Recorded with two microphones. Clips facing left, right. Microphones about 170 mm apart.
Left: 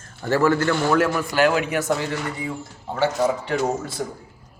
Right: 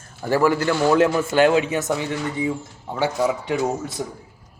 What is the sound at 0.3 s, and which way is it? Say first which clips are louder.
A man's voice: even; 15° right (ahead or behind).